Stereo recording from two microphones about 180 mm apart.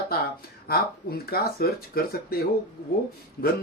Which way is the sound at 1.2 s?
60° left (ahead or behind).